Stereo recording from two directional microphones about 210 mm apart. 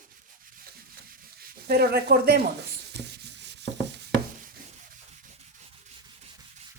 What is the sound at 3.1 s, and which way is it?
Sanding, 55° right (ahead or behind).